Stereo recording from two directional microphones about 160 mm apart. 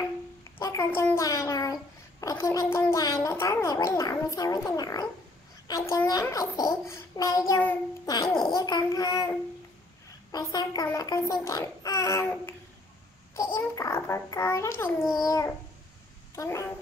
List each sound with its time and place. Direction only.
0.0 s a child's voice: 20° left (ahead or behind)
13.3 s a child's voice: 15° left (ahead or behind)
15.0 s a child's voice: centre (ahead or behind)
15.2 s a child's voice: 20° left (ahead or behind)